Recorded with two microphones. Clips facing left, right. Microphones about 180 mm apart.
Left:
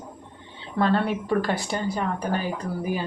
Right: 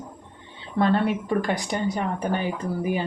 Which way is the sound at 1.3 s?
15° right (ahead or behind).